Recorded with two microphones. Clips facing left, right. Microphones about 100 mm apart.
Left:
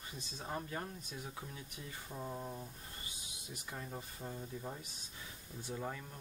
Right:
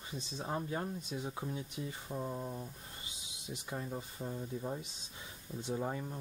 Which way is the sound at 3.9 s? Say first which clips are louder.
Right 4 dB; 5° right (ahead or behind).